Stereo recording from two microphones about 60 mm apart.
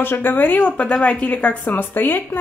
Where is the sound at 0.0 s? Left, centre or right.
Left.